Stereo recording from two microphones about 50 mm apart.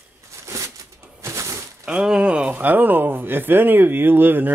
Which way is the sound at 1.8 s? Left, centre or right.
Centre.